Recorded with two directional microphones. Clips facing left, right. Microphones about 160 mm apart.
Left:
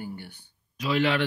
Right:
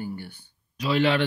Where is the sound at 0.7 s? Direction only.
30° right (ahead or behind).